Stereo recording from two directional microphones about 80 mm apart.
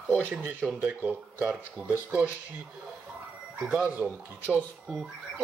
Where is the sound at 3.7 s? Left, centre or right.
Centre.